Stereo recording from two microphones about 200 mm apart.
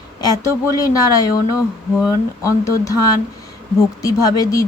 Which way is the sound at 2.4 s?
15° left (ahead or behind).